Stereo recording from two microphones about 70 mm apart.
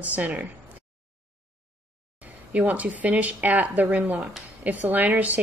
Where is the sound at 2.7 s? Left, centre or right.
Right.